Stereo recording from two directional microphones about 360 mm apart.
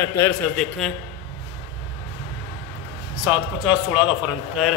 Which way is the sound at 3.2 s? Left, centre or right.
Centre.